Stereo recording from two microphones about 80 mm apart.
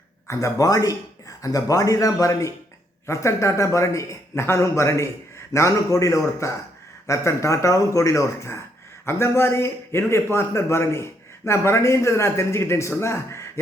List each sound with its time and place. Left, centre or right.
0.3 s a man's voice: left